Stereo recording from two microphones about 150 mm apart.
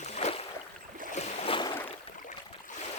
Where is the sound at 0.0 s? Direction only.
45° left (ahead or behind).